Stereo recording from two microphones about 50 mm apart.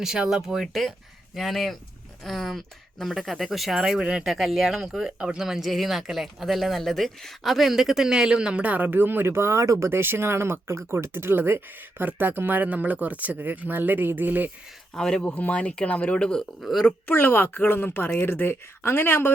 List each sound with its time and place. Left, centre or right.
0.0 s speech: centre
0.7 s speech: centre
4.3 s speech: centre; by 9.7 s right
9.8 s speech: right
12.5 s speech: right
14.9 s speech: centre
15.4 s speech: left
17.1 s speech: left